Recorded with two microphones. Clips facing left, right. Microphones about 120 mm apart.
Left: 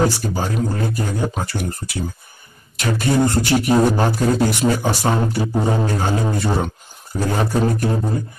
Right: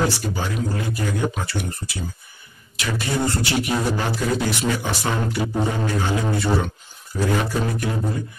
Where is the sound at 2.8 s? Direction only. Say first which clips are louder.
Left 6 dB; 50° left (ahead or behind).